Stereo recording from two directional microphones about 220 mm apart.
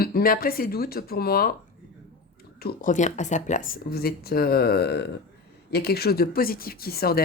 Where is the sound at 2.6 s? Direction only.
35° left (ahead or behind).